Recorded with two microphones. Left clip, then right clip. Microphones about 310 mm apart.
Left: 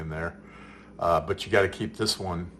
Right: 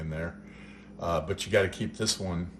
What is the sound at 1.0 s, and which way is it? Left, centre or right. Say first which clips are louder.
Speech: left 6 dB; centre.